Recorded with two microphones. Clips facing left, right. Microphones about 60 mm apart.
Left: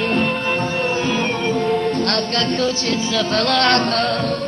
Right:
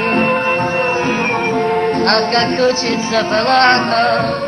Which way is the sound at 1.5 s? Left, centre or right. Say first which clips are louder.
Right 3 dB; right.